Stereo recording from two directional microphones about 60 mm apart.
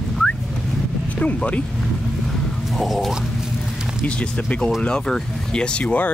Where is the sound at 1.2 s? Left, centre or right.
Left.